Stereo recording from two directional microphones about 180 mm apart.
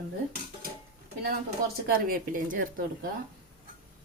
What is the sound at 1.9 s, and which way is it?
Speech, 50° right (ahead or behind).